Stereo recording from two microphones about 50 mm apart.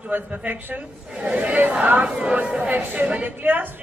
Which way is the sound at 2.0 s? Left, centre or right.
Centre.